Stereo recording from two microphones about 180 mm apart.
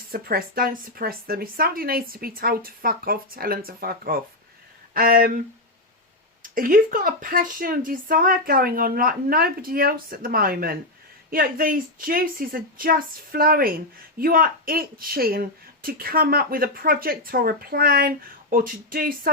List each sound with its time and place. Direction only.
0.1 s speech: 55° right (ahead or behind)
6.4 s speech: 50° right (ahead or behind)